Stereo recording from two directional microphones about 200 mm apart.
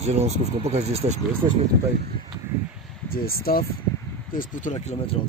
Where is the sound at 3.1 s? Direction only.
50° left (ahead or behind).